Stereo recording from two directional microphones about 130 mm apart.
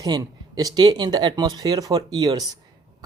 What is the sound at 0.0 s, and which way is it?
Speech, 30° right (ahead or behind).